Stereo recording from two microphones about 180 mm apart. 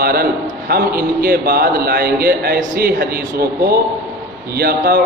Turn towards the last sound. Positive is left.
turn(degrees=-60)  # may be behind; listen again after turning